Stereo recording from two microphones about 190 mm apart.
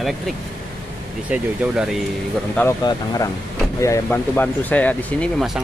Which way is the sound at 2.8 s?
20° left (ahead or behind).